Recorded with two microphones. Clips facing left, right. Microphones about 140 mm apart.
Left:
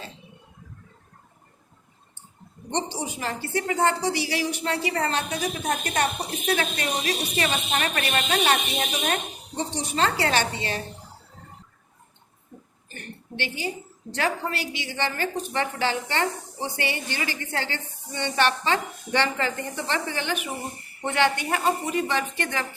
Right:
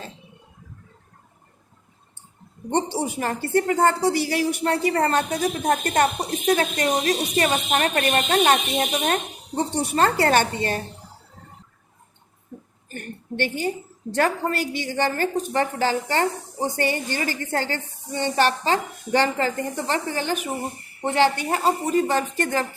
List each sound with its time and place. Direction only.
2.6 s speech: 55° right (ahead or behind)
12.9 s a woman's voice: 50° right (ahead or behind)